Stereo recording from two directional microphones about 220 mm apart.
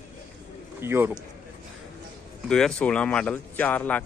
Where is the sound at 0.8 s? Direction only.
10° right (ahead or behind).